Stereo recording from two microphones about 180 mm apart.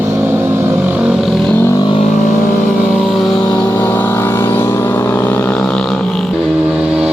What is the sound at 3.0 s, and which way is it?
Vehicle, centre (ahead or behind).